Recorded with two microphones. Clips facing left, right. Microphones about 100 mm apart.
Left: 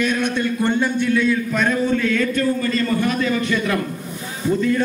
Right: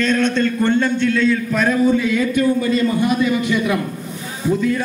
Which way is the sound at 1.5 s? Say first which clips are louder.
Right 3 dB; centre (ahead or behind).